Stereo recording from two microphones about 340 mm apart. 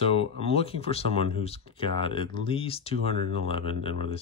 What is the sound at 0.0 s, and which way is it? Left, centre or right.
Speech, centre.